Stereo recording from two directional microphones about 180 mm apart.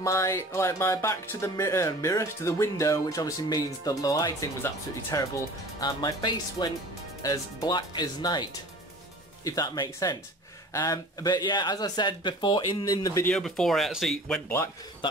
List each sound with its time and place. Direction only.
0.0 s speech: 15° left (ahead or behind)
13.3 s speech: centre (ahead or behind)